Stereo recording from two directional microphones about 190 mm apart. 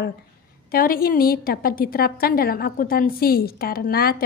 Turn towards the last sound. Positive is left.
turn(degrees=55)  # may be behind; listen again after turning